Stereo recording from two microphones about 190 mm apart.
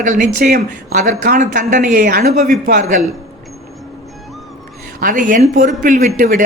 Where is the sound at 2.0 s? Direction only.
55° right (ahead or behind).